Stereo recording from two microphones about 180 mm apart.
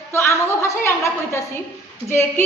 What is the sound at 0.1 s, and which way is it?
A woman's voice, 15° left (ahead or behind).